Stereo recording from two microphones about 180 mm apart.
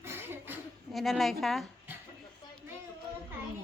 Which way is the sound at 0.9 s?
Centre (ahead or behind).